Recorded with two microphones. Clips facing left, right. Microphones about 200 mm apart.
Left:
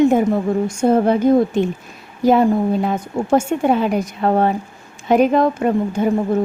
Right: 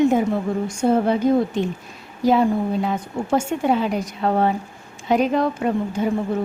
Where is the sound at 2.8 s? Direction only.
50° left (ahead or behind).